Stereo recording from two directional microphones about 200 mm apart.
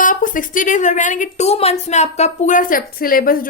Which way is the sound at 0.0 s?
40° left (ahead or behind).